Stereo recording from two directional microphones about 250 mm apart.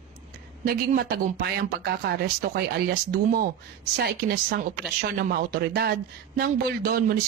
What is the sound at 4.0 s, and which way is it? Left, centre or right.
A woman's voice, right.